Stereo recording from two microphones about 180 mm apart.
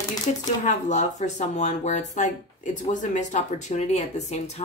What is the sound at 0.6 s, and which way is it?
Speech, 40° left (ahead or behind).